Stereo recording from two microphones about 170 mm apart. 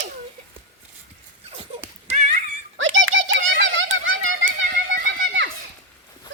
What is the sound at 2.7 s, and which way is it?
Bird, 90° right.